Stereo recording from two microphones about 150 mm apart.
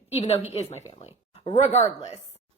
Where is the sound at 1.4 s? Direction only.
55° left (ahead or behind).